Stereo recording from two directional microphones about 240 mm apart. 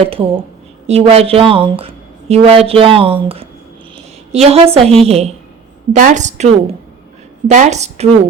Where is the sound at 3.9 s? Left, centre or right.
Right.